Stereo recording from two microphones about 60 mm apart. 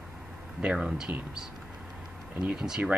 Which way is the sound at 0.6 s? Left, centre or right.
Centre.